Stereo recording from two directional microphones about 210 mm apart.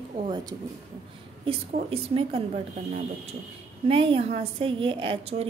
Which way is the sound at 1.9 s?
25° right (ahead or behind).